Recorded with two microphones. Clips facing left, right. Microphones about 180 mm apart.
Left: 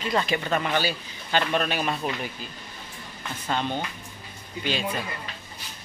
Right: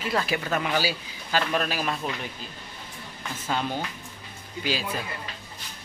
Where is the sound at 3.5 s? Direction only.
5° right (ahead or behind).